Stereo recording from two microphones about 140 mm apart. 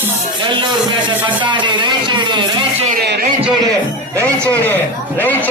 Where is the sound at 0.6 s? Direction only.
35° right (ahead or behind).